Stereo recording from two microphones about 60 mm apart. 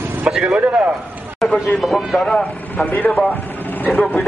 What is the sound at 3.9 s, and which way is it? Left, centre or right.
Speech, centre.